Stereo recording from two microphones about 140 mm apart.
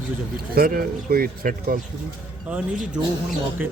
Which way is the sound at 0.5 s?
90° right.